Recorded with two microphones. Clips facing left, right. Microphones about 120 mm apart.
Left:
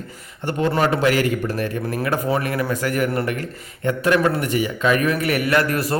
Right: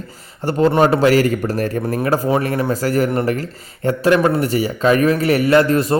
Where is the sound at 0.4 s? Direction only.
30° right (ahead or behind).